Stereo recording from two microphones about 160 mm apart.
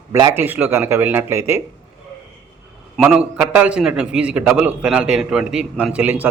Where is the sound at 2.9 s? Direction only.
Centre (ahead or behind).